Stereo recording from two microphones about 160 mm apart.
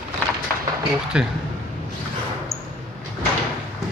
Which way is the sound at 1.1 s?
5° right (ahead or behind).